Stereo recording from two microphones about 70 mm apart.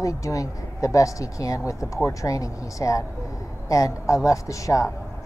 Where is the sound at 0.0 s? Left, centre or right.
Left.